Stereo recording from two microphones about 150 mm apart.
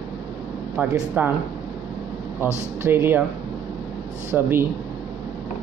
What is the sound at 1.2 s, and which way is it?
Speech, 10° right (ahead or behind).